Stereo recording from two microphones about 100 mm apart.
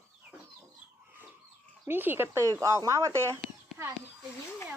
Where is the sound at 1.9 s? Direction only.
20° right (ahead or behind).